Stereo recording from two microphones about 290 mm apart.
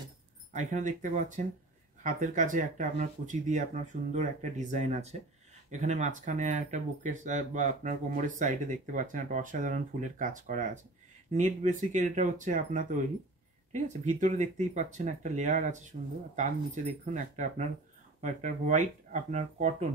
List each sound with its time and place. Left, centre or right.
0.5 s speech: right